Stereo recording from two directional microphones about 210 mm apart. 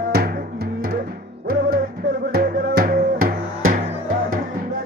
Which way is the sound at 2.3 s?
45° right (ahead or behind).